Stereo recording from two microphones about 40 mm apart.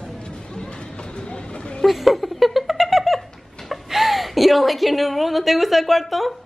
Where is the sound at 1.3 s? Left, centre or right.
Left.